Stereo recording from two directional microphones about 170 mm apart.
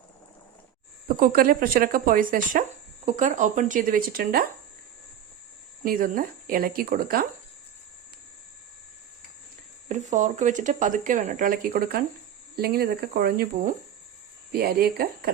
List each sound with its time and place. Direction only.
1.0 s speech: 55° right (ahead or behind)
5.8 s speech: 55° right (ahead or behind)
9.9 s speech: 45° right (ahead or behind); by 15.3 s 65° right (ahead or behind)